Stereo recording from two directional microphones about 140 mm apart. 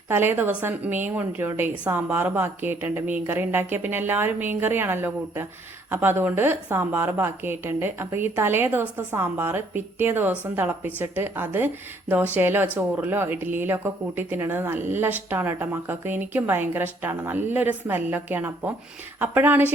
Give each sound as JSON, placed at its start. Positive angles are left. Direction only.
{"t": 0.1, "sound": "a woman's voice", "side_deg": -15}